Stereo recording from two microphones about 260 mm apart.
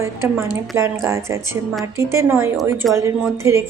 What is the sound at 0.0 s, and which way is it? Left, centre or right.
Speech, centre.